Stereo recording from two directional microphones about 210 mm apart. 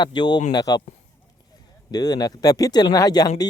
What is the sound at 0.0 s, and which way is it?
Speech, 20° left (ahead or behind).